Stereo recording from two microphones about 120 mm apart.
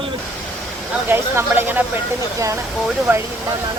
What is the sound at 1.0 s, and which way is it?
Speech, 15° right (ahead or behind).